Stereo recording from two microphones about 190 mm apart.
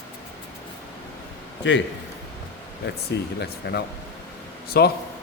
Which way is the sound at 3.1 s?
65° left (ahead or behind).